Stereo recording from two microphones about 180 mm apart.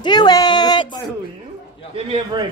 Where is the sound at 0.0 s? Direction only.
25° left (ahead or behind).